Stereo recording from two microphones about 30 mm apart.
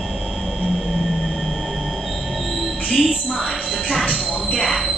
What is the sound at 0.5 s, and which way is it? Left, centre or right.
Train, centre.